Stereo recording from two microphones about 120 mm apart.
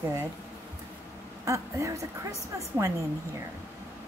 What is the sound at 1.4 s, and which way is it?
A woman's voice, 25° right (ahead or behind).